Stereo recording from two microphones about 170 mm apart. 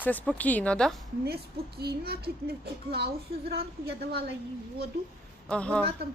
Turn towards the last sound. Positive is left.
turn(degrees=5)  # may be behind; listen again after turning